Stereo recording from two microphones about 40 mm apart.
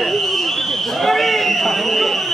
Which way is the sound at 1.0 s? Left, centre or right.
Centre.